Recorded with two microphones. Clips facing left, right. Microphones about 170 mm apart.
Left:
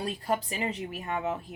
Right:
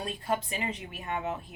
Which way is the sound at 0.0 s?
35° left (ahead or behind).